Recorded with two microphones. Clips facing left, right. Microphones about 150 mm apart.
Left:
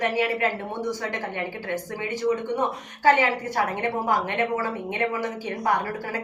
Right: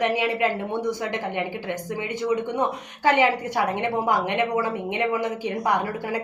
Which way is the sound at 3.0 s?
15° right (ahead or behind).